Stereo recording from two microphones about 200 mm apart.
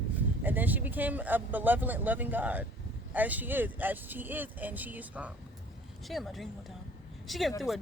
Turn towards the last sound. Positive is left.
turn(degrees=0)  # may be behind; listen again after turning